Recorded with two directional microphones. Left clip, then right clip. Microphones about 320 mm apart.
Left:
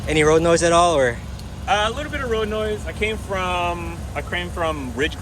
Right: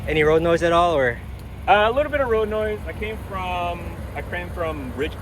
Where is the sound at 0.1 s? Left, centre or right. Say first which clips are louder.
Left 2 dB; centre.